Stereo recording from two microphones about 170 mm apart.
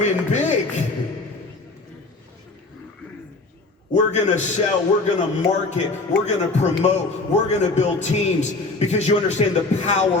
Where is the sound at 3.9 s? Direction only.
45° left (ahead or behind).